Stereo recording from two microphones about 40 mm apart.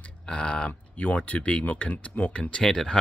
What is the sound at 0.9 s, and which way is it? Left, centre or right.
Speech, left.